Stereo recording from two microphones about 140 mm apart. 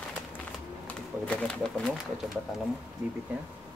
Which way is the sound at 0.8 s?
10° left (ahead or behind).